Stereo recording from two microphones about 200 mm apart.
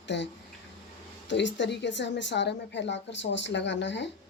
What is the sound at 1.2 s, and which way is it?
A woman's voice, 65° left (ahead or behind).